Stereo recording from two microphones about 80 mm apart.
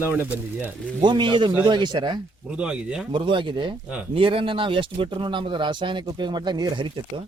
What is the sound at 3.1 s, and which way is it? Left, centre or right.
A man's voice, right.